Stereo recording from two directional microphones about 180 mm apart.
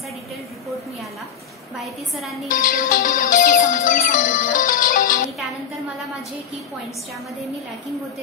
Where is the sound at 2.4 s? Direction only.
50° left (ahead or behind).